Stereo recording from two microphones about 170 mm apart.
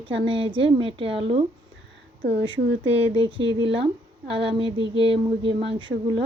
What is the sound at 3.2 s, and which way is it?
Speech, 30° right (ahead or behind).